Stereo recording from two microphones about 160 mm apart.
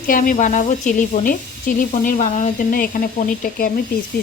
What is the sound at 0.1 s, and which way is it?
Speech, 55° left (ahead or behind).